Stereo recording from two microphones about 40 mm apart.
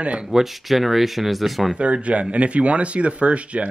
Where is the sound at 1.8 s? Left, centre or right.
Right.